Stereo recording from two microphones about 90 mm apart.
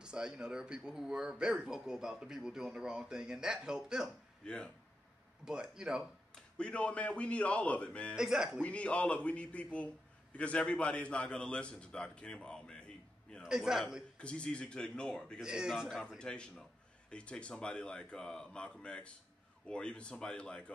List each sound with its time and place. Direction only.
0.0 s speech: 10° right (ahead or behind)
4.4 s a man's voice: 10° left (ahead or behind)
5.4 s speech: 10° right (ahead or behind)
6.3 s a man's voice: 10° left (ahead or behind)
8.2 s a man's voice: 5° right (ahead or behind)
8.5 s a man's voice: 15° left (ahead or behind)
13.4 s a man's voice: 5° right (ahead or behind)
14.1 s a man's voice: 10° left (ahead or behind)
15.4 s speech: 5° right (ahead or behind)
16.2 s a man's voice: 10° left (ahead or behind)